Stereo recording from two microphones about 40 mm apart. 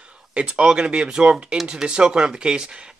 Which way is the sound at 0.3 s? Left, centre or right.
Right.